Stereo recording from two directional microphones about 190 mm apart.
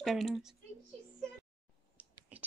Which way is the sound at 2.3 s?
10° right (ahead or behind).